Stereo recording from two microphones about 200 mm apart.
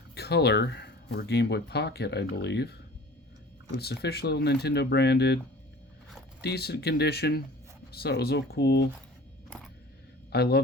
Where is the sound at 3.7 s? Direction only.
55° left (ahead or behind).